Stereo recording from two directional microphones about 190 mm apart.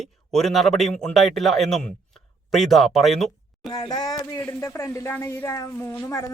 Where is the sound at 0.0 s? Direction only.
Centre (ahead or behind).